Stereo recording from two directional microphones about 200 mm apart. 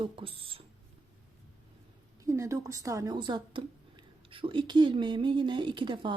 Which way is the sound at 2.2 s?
15° right (ahead or behind).